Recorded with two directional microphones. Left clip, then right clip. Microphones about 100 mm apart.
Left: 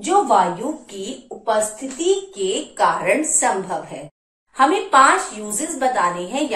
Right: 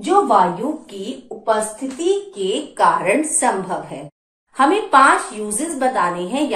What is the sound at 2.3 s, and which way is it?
Speech, 35° right (ahead or behind).